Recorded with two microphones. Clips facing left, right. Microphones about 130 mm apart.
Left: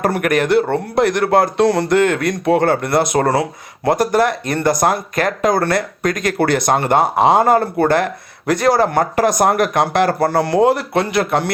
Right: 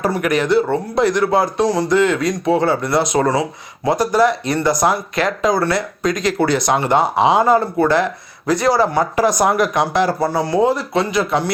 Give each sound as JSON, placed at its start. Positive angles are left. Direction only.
{"t": 0.0, "sound": "speech", "side_deg": 55}